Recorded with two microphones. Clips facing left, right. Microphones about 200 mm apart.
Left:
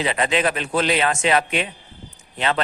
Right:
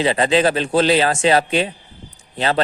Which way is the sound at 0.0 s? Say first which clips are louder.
Right 5 dB; 30° right (ahead or behind).